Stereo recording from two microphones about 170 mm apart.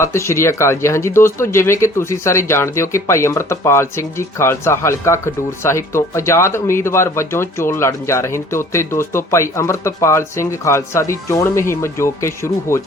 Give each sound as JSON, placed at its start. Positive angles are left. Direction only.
{"t": 0.0, "sound": "speech", "side_deg": 15}